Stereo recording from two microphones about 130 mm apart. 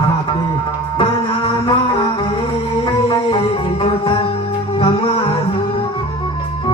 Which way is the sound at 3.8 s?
45° left (ahead or behind).